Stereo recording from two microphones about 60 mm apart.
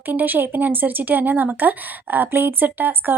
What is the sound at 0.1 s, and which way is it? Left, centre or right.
A woman's voice, right.